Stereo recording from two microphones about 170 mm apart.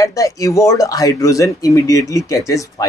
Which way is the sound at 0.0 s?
20° left (ahead or behind).